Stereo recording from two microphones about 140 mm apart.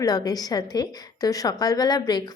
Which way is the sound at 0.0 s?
25° left (ahead or behind).